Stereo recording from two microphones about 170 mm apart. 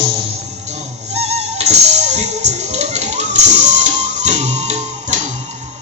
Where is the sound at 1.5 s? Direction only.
40° right (ahead or behind).